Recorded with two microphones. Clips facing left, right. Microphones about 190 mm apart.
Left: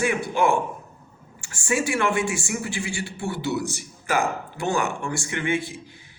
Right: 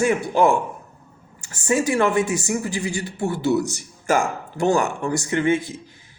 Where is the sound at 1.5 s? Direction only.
40° right (ahead or behind).